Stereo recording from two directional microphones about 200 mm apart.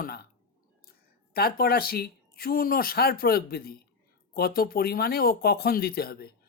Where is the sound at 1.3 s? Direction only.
50° left (ahead or behind).